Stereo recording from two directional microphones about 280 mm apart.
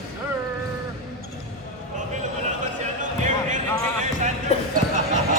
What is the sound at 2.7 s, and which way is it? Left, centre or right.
Basketball bounce, right.